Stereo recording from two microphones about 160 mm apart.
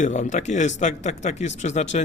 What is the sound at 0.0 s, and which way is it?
Speech, 50° left (ahead or behind).